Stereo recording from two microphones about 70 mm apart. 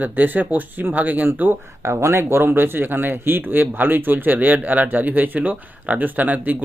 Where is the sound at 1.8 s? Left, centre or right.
Right.